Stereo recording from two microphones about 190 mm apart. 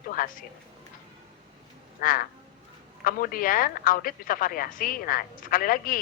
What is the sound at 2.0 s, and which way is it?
Speech, 50° left (ahead or behind).